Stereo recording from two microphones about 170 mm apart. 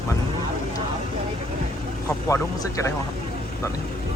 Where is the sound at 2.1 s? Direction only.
20° left (ahead or behind).